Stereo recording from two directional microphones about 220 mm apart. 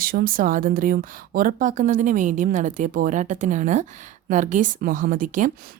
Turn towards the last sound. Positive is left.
turn(degrees=-40)  # may be behind; listen again after turning